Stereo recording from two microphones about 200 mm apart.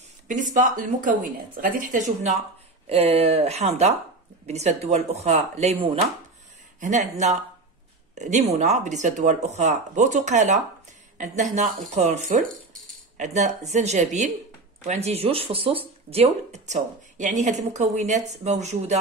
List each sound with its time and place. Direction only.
0.3 s speech: 40° right (ahead or behind)
11.9 s speech: 35° right (ahead or behind)